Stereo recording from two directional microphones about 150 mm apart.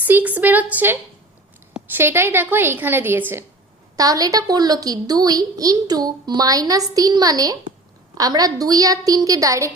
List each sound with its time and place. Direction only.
0.0 s a woman's voice: 10° right (ahead or behind)
3.9 s a woman's voice: 25° right (ahead or behind)